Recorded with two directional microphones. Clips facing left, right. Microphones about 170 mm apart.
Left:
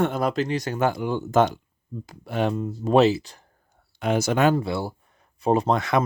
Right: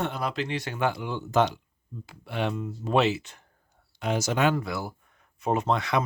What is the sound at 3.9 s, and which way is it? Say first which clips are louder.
Speech: left 4 dB; 55° left (ahead or behind).